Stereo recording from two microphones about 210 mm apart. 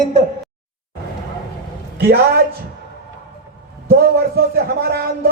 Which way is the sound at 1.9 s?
50° right (ahead or behind).